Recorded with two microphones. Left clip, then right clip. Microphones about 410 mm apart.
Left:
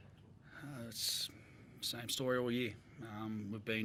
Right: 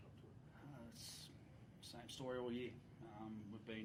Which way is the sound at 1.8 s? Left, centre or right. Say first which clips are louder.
Left 14 dB; left.